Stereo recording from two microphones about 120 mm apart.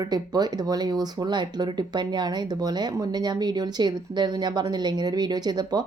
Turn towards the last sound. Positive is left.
turn(degrees=-35)  # may be behind; listen again after turning